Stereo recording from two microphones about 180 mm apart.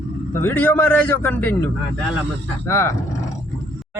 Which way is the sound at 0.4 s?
10° left (ahead or behind).